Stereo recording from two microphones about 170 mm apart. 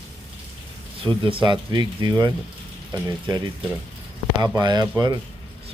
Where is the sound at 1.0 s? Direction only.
30° right (ahead or behind).